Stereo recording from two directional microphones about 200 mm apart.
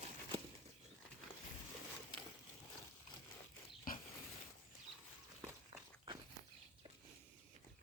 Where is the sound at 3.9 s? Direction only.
45° left (ahead or behind).